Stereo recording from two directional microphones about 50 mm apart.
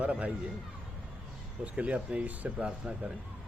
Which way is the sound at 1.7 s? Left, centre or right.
Right.